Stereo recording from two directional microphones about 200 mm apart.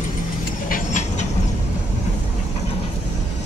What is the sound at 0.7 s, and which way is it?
Train, 40° left (ahead or behind).